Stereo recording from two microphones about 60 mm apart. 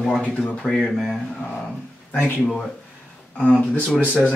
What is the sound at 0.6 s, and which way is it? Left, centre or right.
Speech, centre.